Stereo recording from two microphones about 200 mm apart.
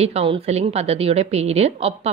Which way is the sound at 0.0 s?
30° right (ahead or behind).